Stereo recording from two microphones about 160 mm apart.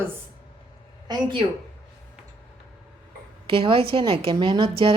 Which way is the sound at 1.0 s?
25° right (ahead or behind).